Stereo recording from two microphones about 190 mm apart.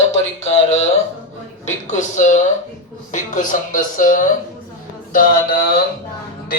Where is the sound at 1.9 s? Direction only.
40° left (ahead or behind).